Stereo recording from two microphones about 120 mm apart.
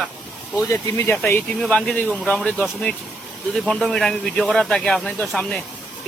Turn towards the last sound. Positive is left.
turn(degrees=5)  # may be behind; listen again after turning